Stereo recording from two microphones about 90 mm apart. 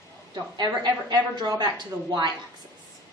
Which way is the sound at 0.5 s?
50° right (ahead or behind).